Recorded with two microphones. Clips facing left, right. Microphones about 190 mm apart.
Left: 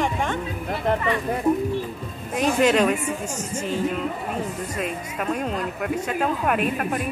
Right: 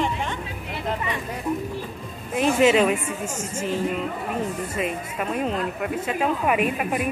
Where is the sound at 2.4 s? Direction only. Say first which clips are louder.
Right 1 dB; 5° right (ahead or behind).